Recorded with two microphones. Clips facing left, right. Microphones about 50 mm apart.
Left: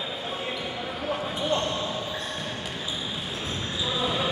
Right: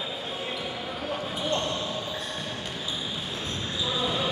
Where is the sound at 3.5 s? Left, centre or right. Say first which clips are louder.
Left 1 dB; centre.